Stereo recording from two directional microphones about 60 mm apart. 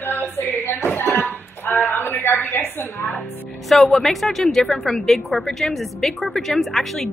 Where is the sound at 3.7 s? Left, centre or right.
Centre.